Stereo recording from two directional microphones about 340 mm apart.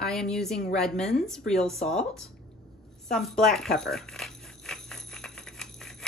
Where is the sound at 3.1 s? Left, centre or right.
Centre.